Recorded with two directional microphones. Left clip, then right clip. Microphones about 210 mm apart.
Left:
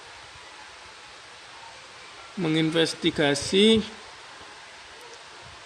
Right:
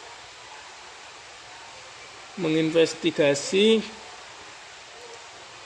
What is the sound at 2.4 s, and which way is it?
A man's voice, 30° left (ahead or behind).